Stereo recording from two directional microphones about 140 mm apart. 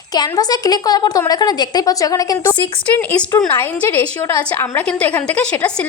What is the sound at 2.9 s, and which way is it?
A woman's voice, 10° left (ahead or behind).